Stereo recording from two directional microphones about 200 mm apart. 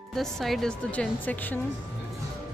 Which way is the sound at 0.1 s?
Centre (ahead or behind).